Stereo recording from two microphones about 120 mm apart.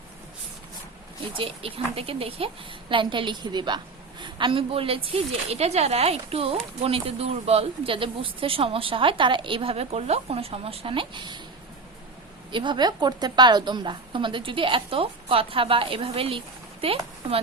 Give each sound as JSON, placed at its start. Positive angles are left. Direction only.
{"t": 1.3, "sound": "a woman's voice", "side_deg": -50}
{"t": 12.5, "sound": "a woman's voice", "side_deg": -40}